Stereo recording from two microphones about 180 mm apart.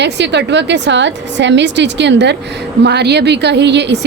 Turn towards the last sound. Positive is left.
turn(degrees=-70)  # may be behind; listen again after turning